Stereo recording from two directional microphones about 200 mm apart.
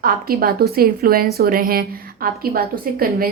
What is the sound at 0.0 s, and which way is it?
A woman's voice, 45° right (ahead or behind).